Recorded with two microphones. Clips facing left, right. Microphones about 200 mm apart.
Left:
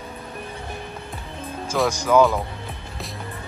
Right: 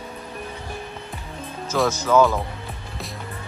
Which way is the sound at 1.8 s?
15° left (ahead or behind).